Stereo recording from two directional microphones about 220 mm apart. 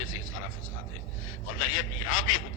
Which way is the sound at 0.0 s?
65° left (ahead or behind).